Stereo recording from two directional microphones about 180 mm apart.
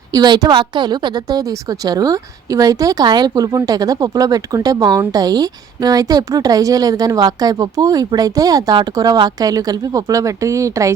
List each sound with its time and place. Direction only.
0.1 s a woman's voice: 20° right (ahead or behind)